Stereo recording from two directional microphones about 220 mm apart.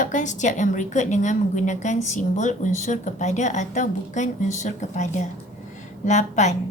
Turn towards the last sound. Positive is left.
turn(degrees=35)  # may be behind; listen again after turning